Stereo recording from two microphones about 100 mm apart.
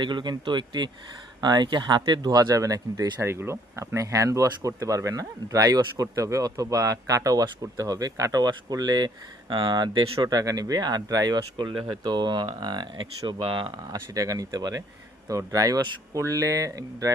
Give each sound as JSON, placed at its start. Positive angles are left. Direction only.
{"t": 0.0, "sound": "speech", "side_deg": -50}
{"t": 3.2, "sound": "speech", "side_deg": -25}
{"t": 13.8, "sound": "speech", "side_deg": -40}